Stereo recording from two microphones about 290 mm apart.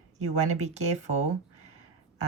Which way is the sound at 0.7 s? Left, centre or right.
Right.